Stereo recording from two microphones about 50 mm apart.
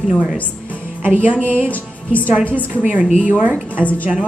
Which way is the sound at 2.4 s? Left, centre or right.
Left.